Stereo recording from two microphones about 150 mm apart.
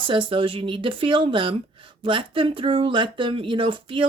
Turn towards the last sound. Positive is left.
turn(degrees=-35)  # may be behind; listen again after turning